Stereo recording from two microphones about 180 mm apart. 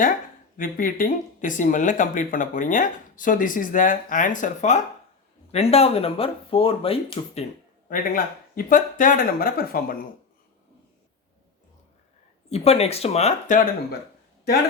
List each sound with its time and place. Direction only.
0.5 s speech: 50° left (ahead or behind); by 7.4 s 30° left (ahead or behind)
7.9 s speech: 50° left (ahead or behind)
12.5 s speech: 35° left (ahead or behind)